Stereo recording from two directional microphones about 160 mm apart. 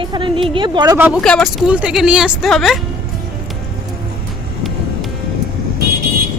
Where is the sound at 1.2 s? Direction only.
5° left (ahead or behind).